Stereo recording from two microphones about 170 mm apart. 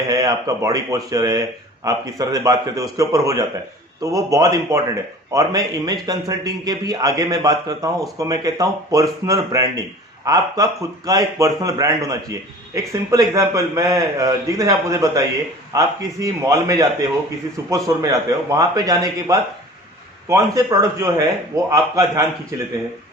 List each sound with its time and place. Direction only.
0.1 s speech: 20° right (ahead or behind)